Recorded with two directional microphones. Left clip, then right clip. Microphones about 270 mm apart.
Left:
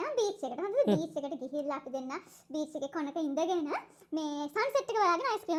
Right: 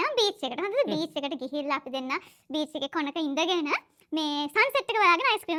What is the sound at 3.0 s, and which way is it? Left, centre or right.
A woman's voice, centre.